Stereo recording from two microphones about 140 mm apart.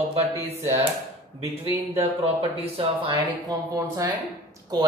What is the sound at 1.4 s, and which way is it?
Speech, 45° right (ahead or behind).